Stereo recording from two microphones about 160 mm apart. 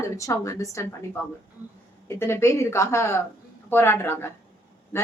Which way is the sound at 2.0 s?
15° left (ahead or behind).